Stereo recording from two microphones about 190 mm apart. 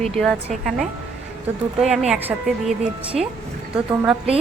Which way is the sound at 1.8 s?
Centre (ahead or behind).